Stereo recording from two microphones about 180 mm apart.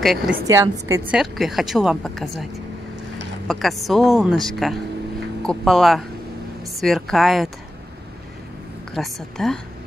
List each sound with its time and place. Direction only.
0.0 s a woman's voice: centre (ahead or behind)
0.5 s a woman's voice: 15° right (ahead or behind)
1.1 s a woman's voice: centre (ahead or behind)
3.4 s a woman's voice: centre (ahead or behind)
8.9 s a woman's voice: centre (ahead or behind)